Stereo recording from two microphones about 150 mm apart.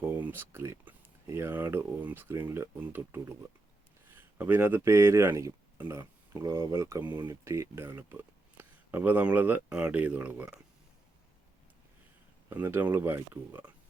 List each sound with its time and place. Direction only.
0.0 s speech: 15° right (ahead or behind)
12.5 s speech: 15° right (ahead or behind)